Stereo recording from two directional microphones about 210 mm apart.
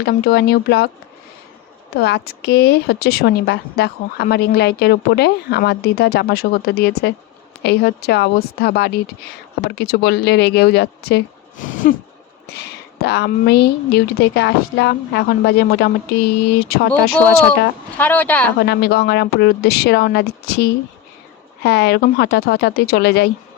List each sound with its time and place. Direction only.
0.0 s speech: 50° left (ahead or behind)
2.0 s speech: 50° left (ahead or behind)
12.5 s speech: 50° left (ahead or behind)
17.2 s speech: 10° left (ahead or behind)
18.6 s speech: 50° left (ahead or behind)